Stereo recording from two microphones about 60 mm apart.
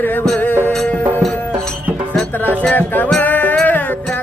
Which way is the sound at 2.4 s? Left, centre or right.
Left.